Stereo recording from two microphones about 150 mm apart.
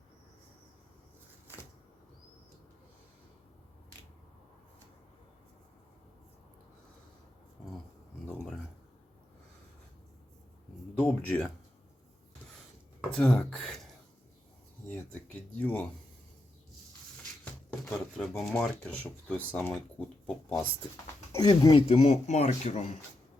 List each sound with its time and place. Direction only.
10.9 s speech: 10° left (ahead or behind)
13.1 s speech: 10° left (ahead or behind)
14.8 s speech: 10° left (ahead or behind)
17.4 s speech: 5° left (ahead or behind)
20.5 s speech: 20° left (ahead or behind)
21.7 s speech: 40° left (ahead or behind)